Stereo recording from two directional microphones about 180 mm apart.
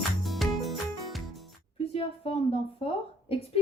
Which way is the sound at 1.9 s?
35° left (ahead or behind).